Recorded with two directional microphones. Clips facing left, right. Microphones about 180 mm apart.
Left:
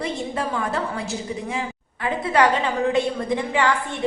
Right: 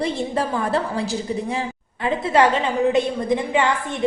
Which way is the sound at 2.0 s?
25° right (ahead or behind).